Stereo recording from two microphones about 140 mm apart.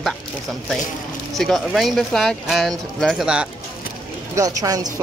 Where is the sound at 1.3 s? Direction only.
Centre (ahead or behind).